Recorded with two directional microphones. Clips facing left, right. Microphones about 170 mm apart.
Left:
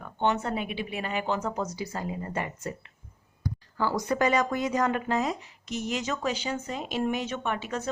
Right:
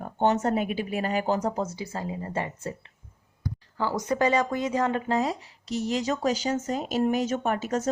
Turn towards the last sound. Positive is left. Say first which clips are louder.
# right 5 dB
turn(degrees=-40)  # may be behind; listen again after turning